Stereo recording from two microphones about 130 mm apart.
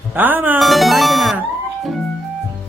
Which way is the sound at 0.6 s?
Centre (ahead or behind).